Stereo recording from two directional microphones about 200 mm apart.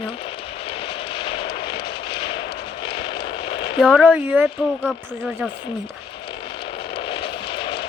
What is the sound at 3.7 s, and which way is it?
Speech, centre (ahead or behind).